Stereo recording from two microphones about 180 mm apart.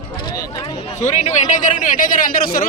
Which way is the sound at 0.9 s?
40° left (ahead or behind).